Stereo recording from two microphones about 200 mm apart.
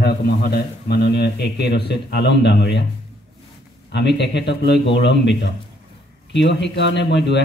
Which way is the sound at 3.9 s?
55° left (ahead or behind).